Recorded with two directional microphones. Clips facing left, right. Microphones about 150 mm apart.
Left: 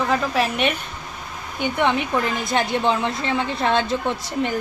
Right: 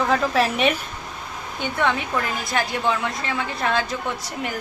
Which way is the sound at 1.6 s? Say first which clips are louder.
Left 3 dB; 15° left (ahead or behind).